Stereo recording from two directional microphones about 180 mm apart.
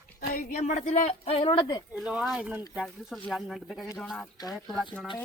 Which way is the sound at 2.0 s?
Centre (ahead or behind).